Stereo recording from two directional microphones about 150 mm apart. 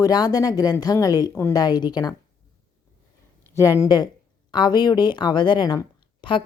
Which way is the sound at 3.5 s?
20° left (ahead or behind).